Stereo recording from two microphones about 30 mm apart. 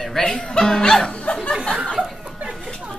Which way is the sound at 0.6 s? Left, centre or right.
Left.